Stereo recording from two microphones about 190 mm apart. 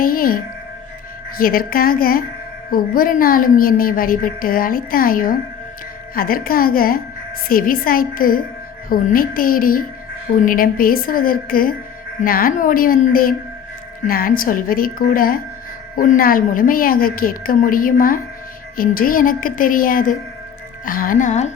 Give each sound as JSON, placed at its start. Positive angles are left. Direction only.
{"t": 0.0, "sound": "music", "side_deg": 50}
{"t": 1.4, "sound": "a woman's voice", "side_deg": 50}